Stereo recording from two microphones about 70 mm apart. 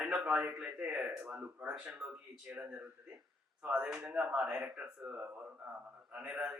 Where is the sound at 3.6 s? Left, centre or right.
Centre.